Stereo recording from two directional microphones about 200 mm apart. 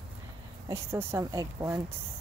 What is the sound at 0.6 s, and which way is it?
Cricket, 15° right (ahead or behind).